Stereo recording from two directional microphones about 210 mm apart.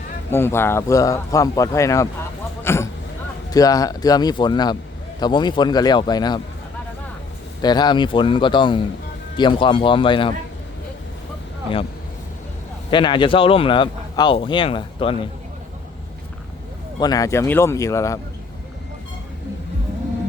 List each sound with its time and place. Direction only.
0.3 s speech: 10° left (ahead or behind)
2.6 s a sound: 10° left (ahead or behind)
3.5 s speech: 15° left (ahead or behind)
7.6 s speech: 20° left (ahead or behind)
12.9 s speech: 20° left (ahead or behind)
17.0 s speech: 15° left (ahead or behind)